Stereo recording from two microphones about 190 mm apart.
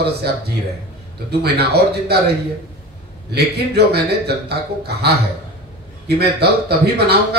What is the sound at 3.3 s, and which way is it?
A man's voice, 60° right (ahead or behind).